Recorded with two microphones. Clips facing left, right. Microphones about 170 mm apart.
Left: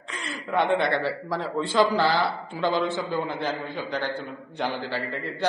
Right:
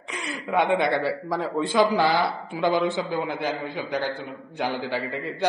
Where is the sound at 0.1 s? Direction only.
10° right (ahead or behind).